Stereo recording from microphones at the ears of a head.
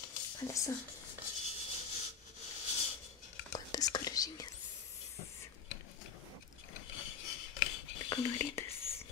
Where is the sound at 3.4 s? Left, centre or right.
Left.